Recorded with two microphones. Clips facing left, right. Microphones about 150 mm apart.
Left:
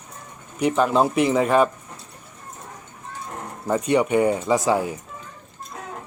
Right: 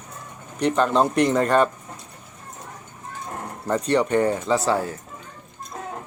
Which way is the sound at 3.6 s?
10° left (ahead or behind).